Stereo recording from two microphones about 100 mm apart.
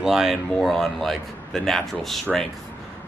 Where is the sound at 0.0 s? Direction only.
5° right (ahead or behind).